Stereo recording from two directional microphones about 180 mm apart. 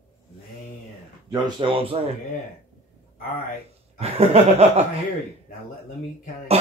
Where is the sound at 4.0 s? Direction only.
35° right (ahead or behind).